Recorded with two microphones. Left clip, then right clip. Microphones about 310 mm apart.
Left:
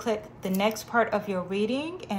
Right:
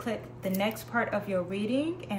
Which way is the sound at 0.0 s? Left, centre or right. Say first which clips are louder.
Left 4 dB; centre.